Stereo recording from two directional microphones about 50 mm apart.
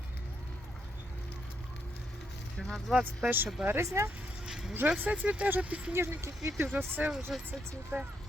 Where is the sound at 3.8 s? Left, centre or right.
Right.